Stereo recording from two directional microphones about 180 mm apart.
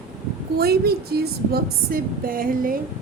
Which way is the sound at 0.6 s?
60° right (ahead or behind).